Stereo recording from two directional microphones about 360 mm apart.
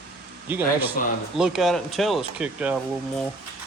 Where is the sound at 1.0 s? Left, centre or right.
Left.